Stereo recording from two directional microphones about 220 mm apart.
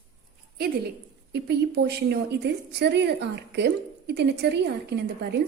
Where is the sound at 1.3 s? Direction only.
50° right (ahead or behind).